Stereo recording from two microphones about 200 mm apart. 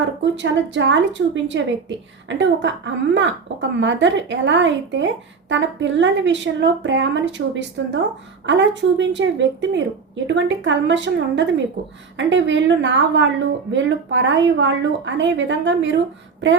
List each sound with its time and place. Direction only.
0.3 s a woman's voice: 65° right (ahead or behind)